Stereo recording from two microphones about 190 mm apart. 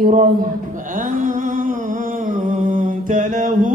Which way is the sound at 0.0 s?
45° right (ahead or behind).